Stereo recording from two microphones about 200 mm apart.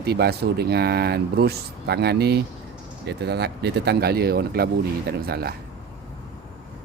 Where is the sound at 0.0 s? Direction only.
55° right (ahead or behind).